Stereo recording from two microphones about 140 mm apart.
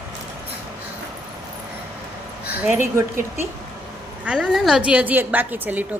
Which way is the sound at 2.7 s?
15° right (ahead or behind).